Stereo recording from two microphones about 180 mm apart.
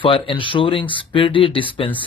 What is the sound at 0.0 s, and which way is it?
A man's voice, 30° left (ahead or behind).